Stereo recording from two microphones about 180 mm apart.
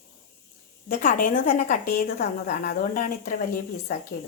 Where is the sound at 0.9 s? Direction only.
50° left (ahead or behind).